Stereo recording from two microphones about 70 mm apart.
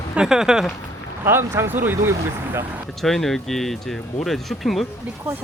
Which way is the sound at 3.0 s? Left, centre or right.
Centre.